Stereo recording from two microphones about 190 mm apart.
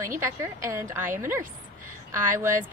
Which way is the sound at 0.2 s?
15° right (ahead or behind).